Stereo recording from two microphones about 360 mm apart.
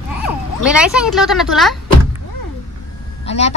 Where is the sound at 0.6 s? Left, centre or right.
Centre.